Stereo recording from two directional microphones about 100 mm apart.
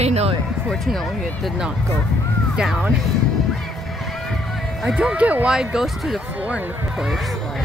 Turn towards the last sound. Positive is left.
turn(degrees=-10)  # may be behind; listen again after turning